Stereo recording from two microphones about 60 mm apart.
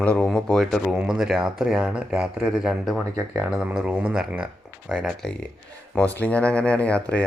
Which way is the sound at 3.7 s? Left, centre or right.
Centre.